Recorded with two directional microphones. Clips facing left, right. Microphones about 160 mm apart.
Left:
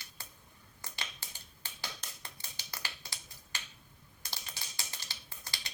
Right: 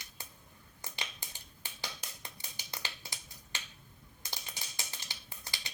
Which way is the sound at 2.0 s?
15° right (ahead or behind).